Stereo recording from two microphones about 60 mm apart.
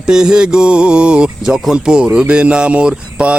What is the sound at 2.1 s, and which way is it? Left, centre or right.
Mantra, centre.